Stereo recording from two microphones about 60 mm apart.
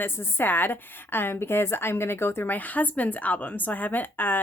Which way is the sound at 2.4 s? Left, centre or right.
Left.